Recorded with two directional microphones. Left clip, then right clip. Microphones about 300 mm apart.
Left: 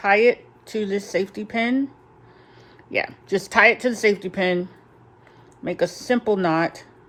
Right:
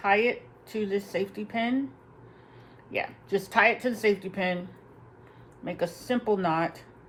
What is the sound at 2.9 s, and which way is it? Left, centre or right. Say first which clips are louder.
Speech: left 6 dB; left.